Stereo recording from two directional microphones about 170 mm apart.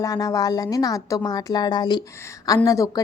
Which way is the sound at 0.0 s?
20° left (ahead or behind).